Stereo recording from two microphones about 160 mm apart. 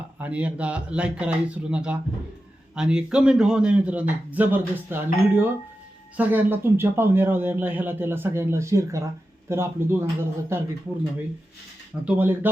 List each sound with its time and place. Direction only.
0.2 s speech: 10° right (ahead or behind)
12.0 s speech: 10° right (ahead or behind)